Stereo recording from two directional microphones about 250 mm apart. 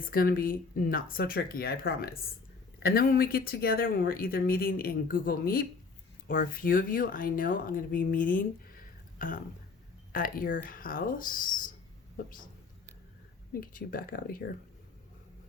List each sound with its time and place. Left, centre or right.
0.0 s speech: left
13.5 s speech: left